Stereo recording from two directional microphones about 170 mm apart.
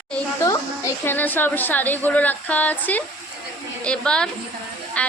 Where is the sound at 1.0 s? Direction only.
10° left (ahead or behind).